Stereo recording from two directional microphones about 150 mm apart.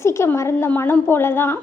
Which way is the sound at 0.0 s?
20° left (ahead or behind).